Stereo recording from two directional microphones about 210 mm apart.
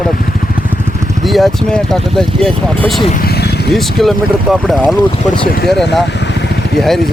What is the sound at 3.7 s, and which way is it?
Speech, centre (ahead or behind).